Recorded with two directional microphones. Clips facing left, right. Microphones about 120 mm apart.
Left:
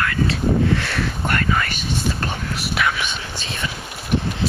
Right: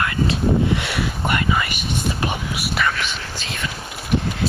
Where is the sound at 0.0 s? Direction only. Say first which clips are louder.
Even; 20° right (ahead or behind).